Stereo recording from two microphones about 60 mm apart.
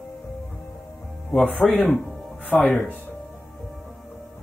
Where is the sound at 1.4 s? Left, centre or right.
Left.